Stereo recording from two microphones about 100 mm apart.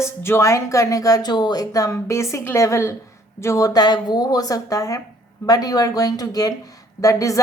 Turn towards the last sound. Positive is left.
turn(degrees=35)  # may be behind; listen again after turning